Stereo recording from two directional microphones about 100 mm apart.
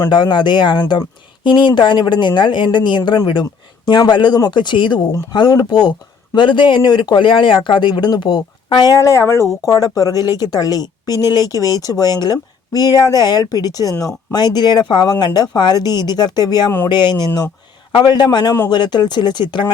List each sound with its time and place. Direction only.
0.1 s speech: 50° left (ahead or behind)
9.0 s speech: 30° left (ahead or behind); by 19.7 s 50° left (ahead or behind)